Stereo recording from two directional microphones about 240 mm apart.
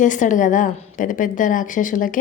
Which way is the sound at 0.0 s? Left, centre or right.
Left.